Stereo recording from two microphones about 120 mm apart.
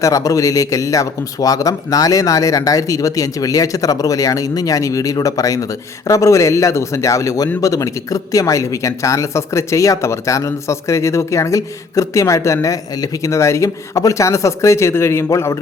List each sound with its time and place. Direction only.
0.0 s speech: 30° left (ahead or behind)